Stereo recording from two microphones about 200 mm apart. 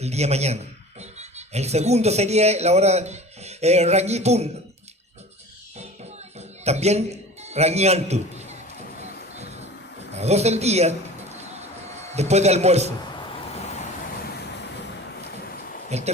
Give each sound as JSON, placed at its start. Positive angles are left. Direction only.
{"t": 0.0, "sound": "a man's voice", "side_deg": -35}
{"t": 6.7, "sound": "a man's voice", "side_deg": -35}
{"t": 10.2, "sound": "a man's voice", "side_deg": -30}
{"t": 15.9, "sound": "a man's voice", "side_deg": -35}